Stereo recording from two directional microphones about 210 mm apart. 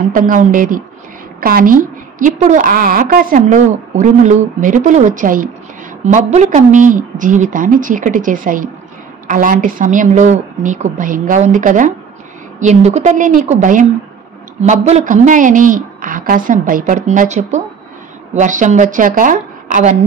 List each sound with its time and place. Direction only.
0.1 s a woman's voice: 40° right (ahead or behind)